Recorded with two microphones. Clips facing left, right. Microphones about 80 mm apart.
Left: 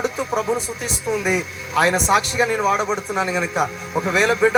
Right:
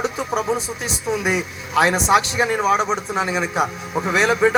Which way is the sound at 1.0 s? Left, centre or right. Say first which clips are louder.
Even; centre.